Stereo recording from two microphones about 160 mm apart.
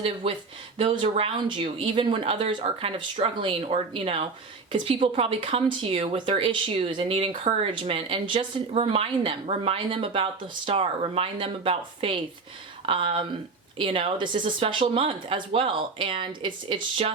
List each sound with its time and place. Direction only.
0.0 s speech: 40° right (ahead or behind)